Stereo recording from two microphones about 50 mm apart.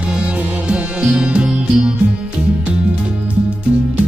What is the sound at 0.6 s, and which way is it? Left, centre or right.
Music, centre.